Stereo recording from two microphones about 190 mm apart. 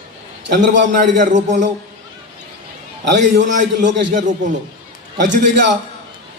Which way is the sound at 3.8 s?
65° right (ahead or behind).